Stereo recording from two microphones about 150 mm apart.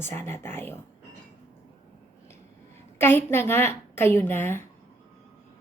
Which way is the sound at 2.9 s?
15° left (ahead or behind).